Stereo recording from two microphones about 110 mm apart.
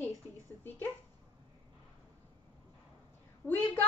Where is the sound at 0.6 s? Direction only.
20° left (ahead or behind).